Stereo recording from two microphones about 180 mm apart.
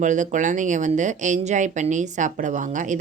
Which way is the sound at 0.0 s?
45° right (ahead or behind).